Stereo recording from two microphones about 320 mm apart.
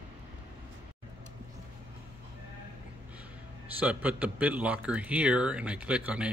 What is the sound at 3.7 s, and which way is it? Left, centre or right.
A man's voice, centre.